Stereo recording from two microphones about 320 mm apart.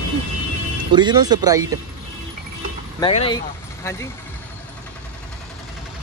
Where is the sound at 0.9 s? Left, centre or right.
Centre.